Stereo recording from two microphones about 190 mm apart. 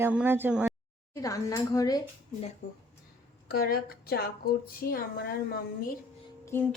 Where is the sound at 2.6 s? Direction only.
45° left (ahead or behind).